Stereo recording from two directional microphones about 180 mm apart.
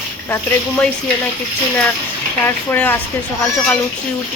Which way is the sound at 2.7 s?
10° left (ahead or behind).